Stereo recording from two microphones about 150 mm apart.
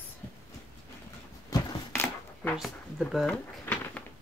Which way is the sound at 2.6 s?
Centre (ahead or behind).